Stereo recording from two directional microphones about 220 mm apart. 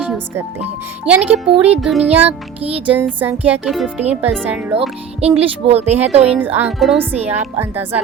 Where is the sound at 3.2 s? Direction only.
10° right (ahead or behind).